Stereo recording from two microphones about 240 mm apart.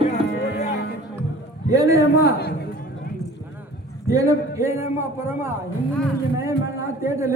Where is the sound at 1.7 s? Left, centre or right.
Centre.